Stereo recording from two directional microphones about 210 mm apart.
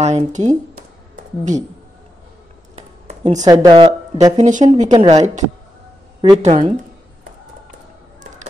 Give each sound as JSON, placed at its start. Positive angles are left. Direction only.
{"t": 0.0, "sound": "speech", "side_deg": -35}
{"t": 1.1, "sound": "a sound", "side_deg": -35}
{"t": 2.7, "sound": "a sound", "side_deg": -35}
{"t": 3.4, "sound": "speech", "side_deg": -20}
{"t": 4.5, "sound": "speech", "side_deg": -35}
{"t": 6.4, "sound": "speech", "side_deg": -35}